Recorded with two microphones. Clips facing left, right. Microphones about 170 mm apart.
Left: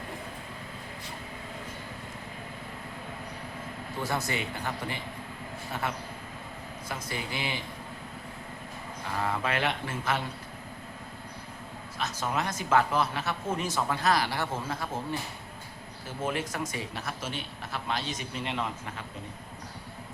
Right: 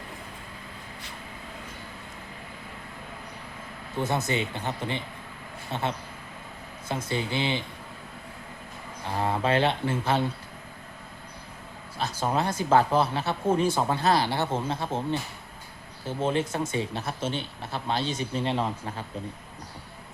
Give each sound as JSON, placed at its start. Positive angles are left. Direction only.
{"t": 4.0, "sound": "speech", "side_deg": -20}
{"t": 9.1, "sound": "speech", "side_deg": -30}
{"t": 11.9, "sound": "speech", "side_deg": -30}
{"t": 16.0, "sound": "speech", "side_deg": -25}